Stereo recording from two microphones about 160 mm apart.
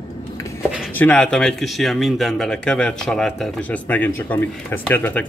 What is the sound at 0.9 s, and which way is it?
A man's voice, 10° left (ahead or behind).